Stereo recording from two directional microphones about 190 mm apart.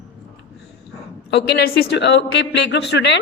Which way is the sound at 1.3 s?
60° left (ahead or behind).